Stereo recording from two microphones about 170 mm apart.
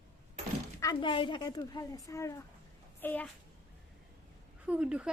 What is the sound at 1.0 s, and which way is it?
A woman's voice, 30° left (ahead or behind).